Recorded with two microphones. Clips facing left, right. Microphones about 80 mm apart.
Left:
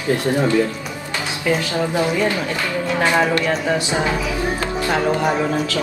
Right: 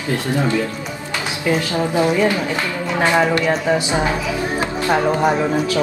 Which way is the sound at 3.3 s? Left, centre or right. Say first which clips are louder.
Right 2 dB; right.